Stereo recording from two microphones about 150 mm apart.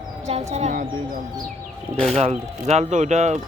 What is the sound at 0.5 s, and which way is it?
Speech, 55° right (ahead or behind).